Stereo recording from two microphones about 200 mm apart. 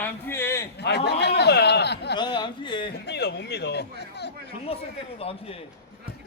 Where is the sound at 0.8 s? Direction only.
55° left (ahead or behind).